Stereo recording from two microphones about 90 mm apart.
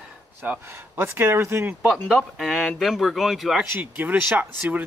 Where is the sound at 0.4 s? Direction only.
25° right (ahead or behind).